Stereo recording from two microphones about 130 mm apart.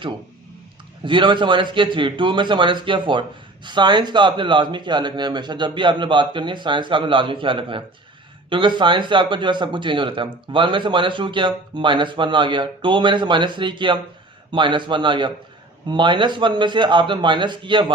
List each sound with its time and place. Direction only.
1.0 s a man's voice: 40° right (ahead or behind)